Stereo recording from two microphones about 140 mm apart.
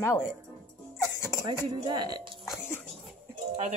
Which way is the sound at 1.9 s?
30° right (ahead or behind).